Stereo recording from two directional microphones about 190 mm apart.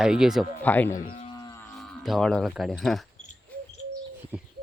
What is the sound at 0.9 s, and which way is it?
Speech, 45° left (ahead or behind).